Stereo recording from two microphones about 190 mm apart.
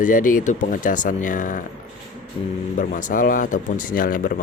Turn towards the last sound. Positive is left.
turn(degrees=45)  # may be behind; listen again after turning